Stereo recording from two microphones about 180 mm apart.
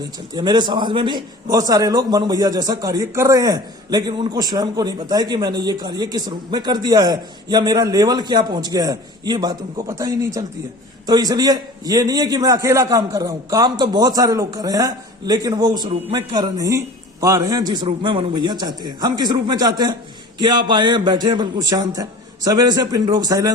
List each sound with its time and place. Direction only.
0.3 s a man's voice: 25° right (ahead or behind)